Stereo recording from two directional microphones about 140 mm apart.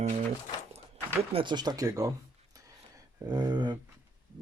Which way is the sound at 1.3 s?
35° right (ahead or behind).